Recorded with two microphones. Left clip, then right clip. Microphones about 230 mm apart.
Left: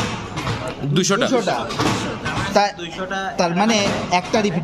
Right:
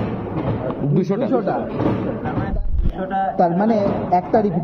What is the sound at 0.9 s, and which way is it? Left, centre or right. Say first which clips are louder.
Speech: left 3 dB; left.